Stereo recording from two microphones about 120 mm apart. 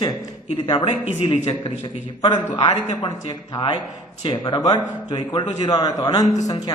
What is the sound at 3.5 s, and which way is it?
A man's voice, 40° left (ahead or behind).